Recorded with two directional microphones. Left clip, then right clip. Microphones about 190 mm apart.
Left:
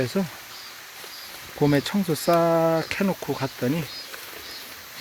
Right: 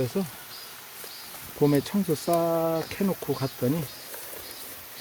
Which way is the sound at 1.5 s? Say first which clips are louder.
Left 2 dB; 10° left (ahead or behind).